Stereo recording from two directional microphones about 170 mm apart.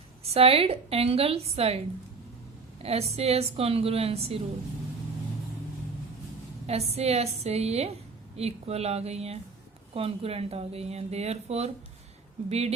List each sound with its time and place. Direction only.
0.2 s speech: 35° right (ahead or behind)
2.8 s speech: 35° right (ahead or behind)
6.7 s speech: 40° right (ahead or behind)